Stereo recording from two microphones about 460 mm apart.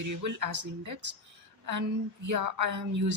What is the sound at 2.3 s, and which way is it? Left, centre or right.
Speech, right.